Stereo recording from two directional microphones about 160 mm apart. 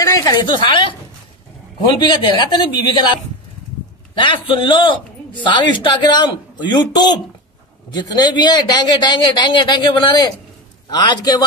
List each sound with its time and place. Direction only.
0.0 s speech: 20° left (ahead or behind)
2.0 s speech: 30° left (ahead or behind)
4.2 s speech: 30° left (ahead or behind)